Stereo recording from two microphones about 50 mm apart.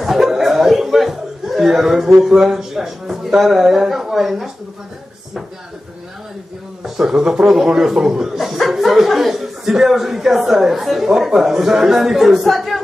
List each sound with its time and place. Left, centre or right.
0.0 s chuckle: centre
2.2 s speech: centre
6.8 s speech: centre